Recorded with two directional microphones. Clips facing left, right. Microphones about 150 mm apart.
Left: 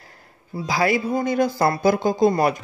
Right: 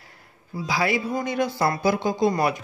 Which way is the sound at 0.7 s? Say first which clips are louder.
Left 3 dB; 45° left (ahead or behind).